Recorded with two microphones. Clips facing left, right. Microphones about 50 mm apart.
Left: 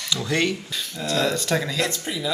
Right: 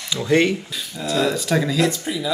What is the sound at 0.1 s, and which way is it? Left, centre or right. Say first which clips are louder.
Speech: right 6 dB; centre.